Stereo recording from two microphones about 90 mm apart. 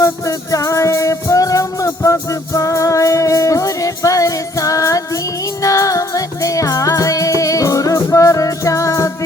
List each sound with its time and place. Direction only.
0.0 s music: 40° left (ahead or behind)